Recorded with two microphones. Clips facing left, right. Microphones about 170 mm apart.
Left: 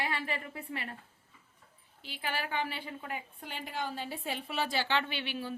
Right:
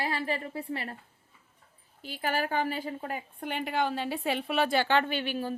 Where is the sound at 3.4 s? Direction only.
65° right (ahead or behind).